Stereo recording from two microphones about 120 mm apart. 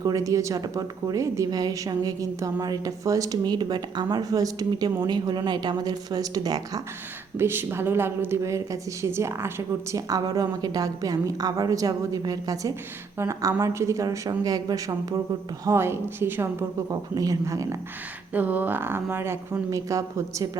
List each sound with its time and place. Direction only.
0.0 s a woman's voice: 30° right (ahead or behind)
7.3 s speech: 20° right (ahead or behind)
10.1 s a woman's voice: 30° right (ahead or behind)
16.9 s speech: 30° right (ahead or behind)
18.3 s speech: 15° right (ahead or behind)